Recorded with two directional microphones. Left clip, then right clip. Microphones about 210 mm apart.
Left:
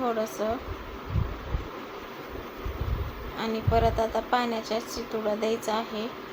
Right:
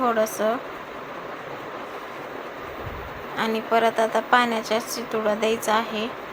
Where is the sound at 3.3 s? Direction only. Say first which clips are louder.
Right 5 dB; 10° right (ahead or behind).